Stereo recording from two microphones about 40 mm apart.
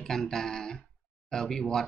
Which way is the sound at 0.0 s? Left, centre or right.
Centre.